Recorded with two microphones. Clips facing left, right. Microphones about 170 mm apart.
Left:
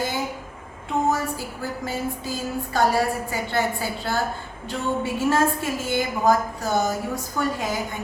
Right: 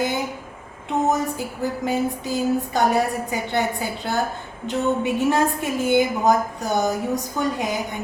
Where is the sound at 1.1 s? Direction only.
20° right (ahead or behind).